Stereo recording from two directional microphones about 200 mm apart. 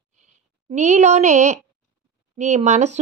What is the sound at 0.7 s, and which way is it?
Speech, 35° right (ahead or behind).